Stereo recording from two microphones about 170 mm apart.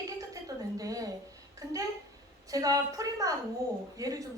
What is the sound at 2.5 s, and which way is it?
A woman's voice, 20° right (ahead or behind).